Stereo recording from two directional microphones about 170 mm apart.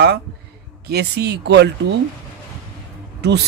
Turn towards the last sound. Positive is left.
turn(degrees=-90)